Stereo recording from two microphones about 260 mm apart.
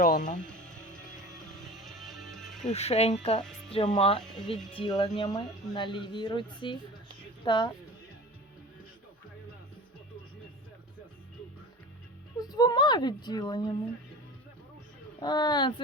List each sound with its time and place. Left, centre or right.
0.0 s speech: left
0.4 s music: centre
2.6 s speech: left
4.2 s speech: centre
4.7 s speech: centre
12.4 s speech: centre
15.2 s speech: centre